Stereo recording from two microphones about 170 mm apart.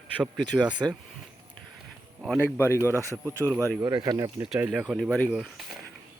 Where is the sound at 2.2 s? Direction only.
Centre (ahead or behind).